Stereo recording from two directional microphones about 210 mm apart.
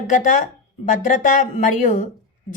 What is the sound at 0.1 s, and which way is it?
A woman's voice, 40° left (ahead or behind).